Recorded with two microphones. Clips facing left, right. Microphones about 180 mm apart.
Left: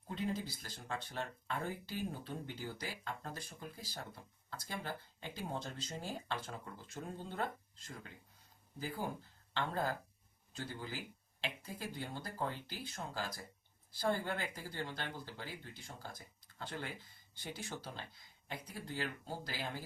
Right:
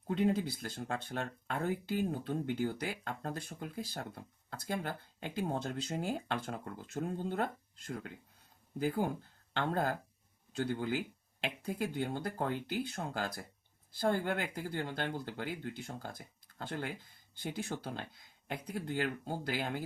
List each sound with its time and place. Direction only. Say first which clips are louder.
0.1 s speech: right 8 dB; 65° right (ahead or behind)